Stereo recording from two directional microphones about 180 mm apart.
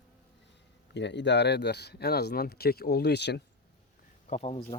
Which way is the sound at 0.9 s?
75° left (ahead or behind).